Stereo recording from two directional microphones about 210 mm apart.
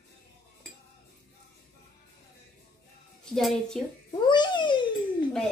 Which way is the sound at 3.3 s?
Centre (ahead or behind).